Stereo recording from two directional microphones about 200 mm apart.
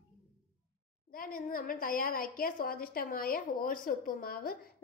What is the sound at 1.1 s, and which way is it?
A woman's voice, 45° left (ahead or behind).